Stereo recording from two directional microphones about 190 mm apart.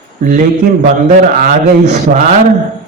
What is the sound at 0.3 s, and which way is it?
Mantra, 40° right (ahead or behind).